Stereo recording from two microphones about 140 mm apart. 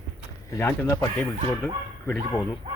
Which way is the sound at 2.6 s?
45° right (ahead or behind).